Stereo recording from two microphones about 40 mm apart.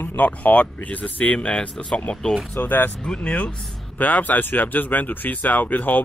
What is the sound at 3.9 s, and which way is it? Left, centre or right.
Speech, left.